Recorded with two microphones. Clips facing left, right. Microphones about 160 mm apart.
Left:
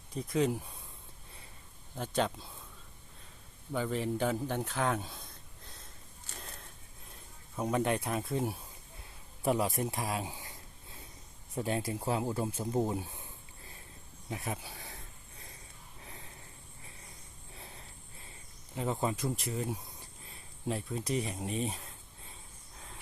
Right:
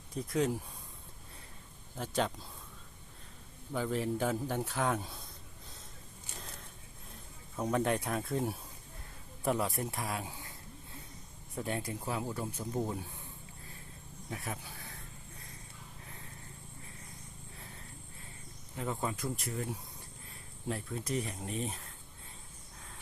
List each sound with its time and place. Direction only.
0.2 s speech: 5° left (ahead or behind)
2.0 s speech: centre (ahead or behind)
3.7 s a man's voice: centre (ahead or behind)
6.4 s a sound: centre (ahead or behind)
7.5 s speech: 5° left (ahead or behind)
9.4 s a man's voice: 15° left (ahead or behind)
11.5 s a man's voice: 20° left (ahead or behind)
14.3 s speech: 20° left (ahead or behind)
18.8 s a man's voice: 20° left (ahead or behind)
20.7 s speech: 15° left (ahead or behind)